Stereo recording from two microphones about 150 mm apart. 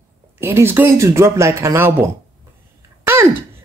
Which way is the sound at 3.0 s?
15° right (ahead or behind).